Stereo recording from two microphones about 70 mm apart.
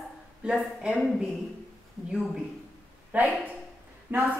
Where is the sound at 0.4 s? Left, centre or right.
Centre.